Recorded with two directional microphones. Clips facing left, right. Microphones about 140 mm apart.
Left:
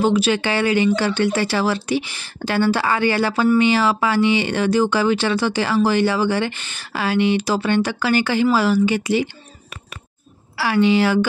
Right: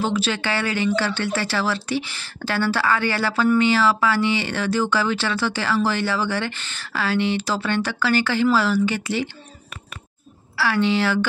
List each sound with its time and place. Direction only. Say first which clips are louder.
0.0 s speech: left 6 dB; 15° left (ahead or behind)
10.6 s speech: left 4 dB; 15° left (ahead or behind)